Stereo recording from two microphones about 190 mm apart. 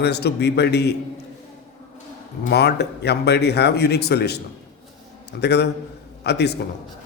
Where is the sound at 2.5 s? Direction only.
60° left (ahead or behind).